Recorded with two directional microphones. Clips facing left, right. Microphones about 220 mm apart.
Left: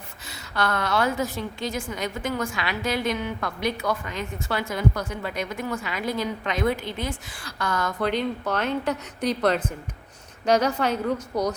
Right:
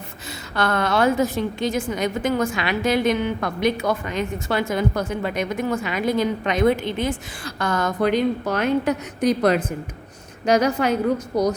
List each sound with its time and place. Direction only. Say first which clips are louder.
0.5 s a woman's voice: right 4 dB; 25° right (ahead or behind)
8.0 s a woman's voice: right 6 dB; 10° right (ahead or behind)